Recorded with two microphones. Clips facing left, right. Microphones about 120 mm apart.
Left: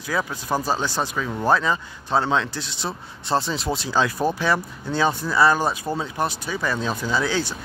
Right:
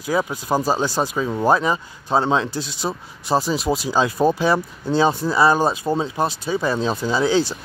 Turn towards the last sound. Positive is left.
turn(degrees=-20)  # may be behind; listen again after turning